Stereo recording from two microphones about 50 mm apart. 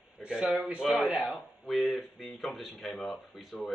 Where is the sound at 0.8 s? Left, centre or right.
Centre.